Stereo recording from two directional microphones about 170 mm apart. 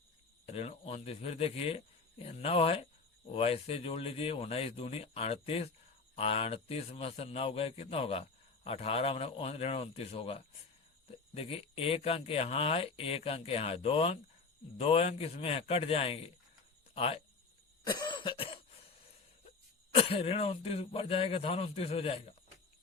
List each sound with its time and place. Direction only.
0.4 s a man's voice: 35° left (ahead or behind)
17.9 s cough: 25° left (ahead or behind)
19.9 s a man's voice: 35° left (ahead or behind)